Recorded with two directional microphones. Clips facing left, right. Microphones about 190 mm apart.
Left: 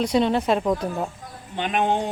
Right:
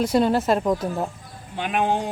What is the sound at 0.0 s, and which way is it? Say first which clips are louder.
A man's voice: right 1 dB; 5° right (ahead or behind).